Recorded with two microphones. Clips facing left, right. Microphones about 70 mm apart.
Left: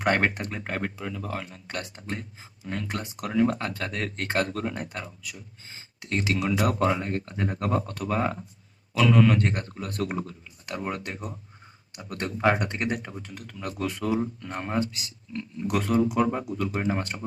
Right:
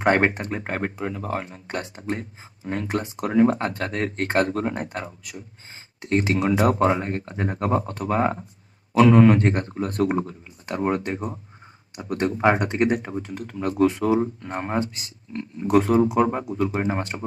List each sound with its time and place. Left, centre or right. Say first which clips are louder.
0.0 s speech: right 5 dB; right